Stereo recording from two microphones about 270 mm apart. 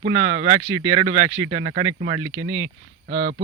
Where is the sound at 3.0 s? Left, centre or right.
Right.